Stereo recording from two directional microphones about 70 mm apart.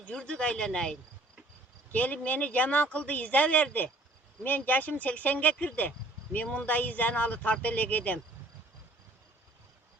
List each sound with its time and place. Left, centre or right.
0.2 s speech: centre
1.9 s speech: centre